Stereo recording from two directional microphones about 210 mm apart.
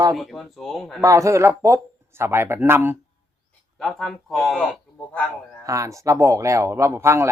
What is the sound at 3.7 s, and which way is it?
A man's voice, centre (ahead or behind).